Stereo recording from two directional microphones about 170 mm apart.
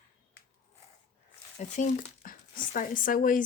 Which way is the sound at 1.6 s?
45° left (ahead or behind).